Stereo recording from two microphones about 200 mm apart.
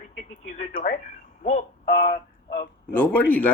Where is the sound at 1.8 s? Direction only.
50° left (ahead or behind).